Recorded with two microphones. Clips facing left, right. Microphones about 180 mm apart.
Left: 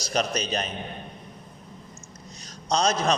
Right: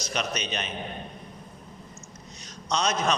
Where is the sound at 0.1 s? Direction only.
35° left (ahead or behind).